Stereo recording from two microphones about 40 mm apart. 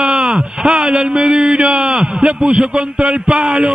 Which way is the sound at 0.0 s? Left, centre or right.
Centre.